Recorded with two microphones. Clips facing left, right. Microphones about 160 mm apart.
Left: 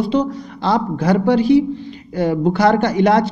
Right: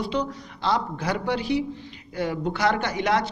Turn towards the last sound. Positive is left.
turn(degrees=35)  # may be behind; listen again after turning